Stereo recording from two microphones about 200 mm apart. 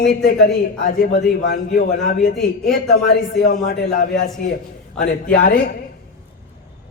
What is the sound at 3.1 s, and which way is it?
A man's voice, 50° left (ahead or behind).